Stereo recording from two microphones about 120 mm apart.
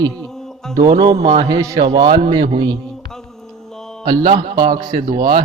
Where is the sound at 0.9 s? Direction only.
45° right (ahead or behind).